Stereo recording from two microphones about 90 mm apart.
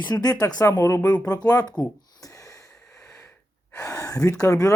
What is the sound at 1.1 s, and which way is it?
Speech, 45° left (ahead or behind).